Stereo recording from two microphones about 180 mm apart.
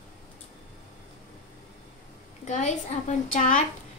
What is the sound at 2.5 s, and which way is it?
A woman's voice, 40° left (ahead or behind).